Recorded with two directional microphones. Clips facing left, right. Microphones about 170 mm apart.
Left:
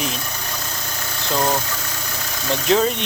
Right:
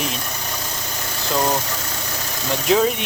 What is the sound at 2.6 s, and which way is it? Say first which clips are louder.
Speech: right 1 dB; 5° right (ahead or behind).